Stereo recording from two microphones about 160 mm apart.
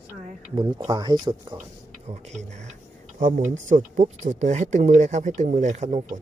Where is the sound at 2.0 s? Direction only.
45° right (ahead or behind).